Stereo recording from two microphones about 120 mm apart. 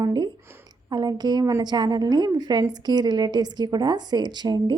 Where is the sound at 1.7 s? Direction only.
35° right (ahead or behind).